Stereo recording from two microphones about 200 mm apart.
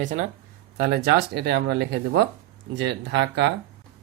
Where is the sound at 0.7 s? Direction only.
50° right (ahead or behind).